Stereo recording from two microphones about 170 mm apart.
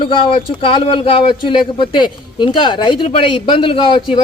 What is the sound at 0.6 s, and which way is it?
A man's voice, 30° left (ahead or behind).